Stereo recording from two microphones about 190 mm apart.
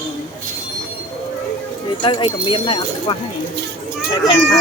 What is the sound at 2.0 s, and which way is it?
Speech, 25° left (ahead or behind).